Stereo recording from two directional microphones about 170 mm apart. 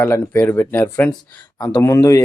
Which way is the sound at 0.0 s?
10° left (ahead or behind).